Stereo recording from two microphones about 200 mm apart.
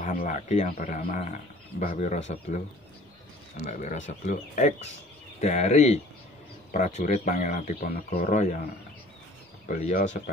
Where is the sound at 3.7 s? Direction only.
40° left (ahead or behind).